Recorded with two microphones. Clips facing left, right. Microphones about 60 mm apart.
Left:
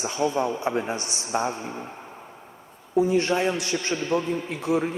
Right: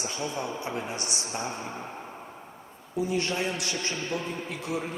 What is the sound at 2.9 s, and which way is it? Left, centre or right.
A man's voice, left.